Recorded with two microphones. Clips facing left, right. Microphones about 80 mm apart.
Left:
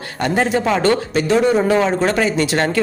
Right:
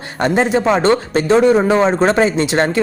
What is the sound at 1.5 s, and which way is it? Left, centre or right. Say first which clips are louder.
Speech: right 3 dB; right.